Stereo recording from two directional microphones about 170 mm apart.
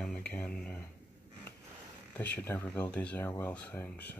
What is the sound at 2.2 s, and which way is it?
Speech, 10° left (ahead or behind).